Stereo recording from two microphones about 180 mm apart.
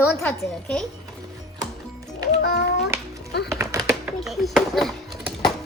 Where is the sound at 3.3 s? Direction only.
65° left (ahead or behind).